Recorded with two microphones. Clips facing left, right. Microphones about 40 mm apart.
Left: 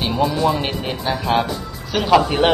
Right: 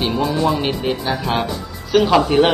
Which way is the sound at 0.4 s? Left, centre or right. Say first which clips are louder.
Right 1 dB; centre.